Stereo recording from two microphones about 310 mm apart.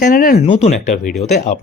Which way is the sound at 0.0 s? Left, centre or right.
Left.